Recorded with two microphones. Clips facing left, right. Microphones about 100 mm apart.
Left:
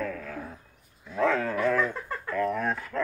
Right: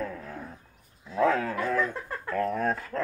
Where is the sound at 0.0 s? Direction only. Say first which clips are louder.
Left 2 dB; 25° right (ahead or behind).